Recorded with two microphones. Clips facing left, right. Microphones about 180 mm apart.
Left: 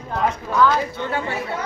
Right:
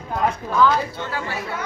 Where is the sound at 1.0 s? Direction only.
25° left (ahead or behind).